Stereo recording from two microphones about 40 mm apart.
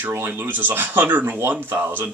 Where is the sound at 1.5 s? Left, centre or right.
Right.